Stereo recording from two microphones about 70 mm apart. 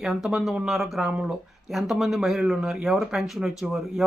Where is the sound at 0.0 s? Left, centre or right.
Centre.